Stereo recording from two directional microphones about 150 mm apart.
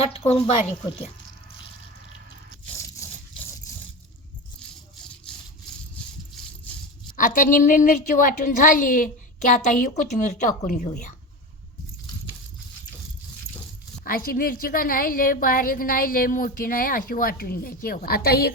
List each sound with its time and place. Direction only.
0.0 s speech: 40° left (ahead or behind)
2.7 s rattle: 20° left (ahead or behind)
5.2 s toothbrush: 5° left (ahead or behind)
7.2 s a woman's voice: 65° left (ahead or behind)
14.0 s a woman's voice: 75° left (ahead or behind); by 18.5 s 90° left